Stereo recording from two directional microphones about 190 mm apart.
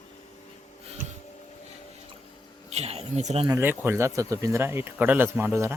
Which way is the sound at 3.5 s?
10° right (ahead or behind).